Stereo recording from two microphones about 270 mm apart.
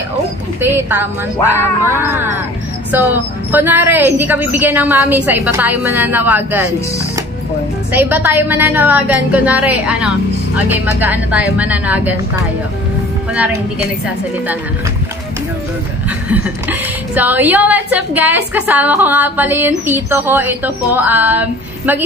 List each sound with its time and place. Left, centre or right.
0.6 s a woman's voice: centre
7.9 s a woman's voice: centre
13.3 s a woman's voice: centre
16.3 s a woman's voice: centre